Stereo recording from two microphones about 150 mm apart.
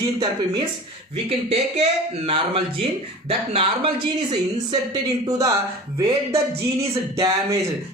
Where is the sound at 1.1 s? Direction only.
45° right (ahead or behind).